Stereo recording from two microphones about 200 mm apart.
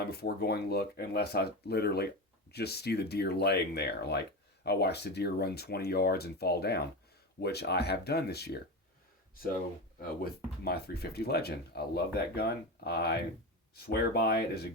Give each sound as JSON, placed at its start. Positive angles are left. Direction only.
{"t": 0.0, "sound": "speech", "side_deg": 50}
{"t": 10.6, "sound": "speech", "side_deg": 50}